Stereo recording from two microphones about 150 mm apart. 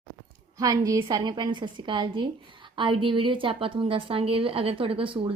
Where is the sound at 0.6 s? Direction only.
25° right (ahead or behind).